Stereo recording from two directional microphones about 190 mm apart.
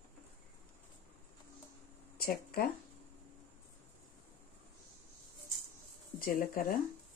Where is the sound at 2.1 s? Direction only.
50° left (ahead or behind).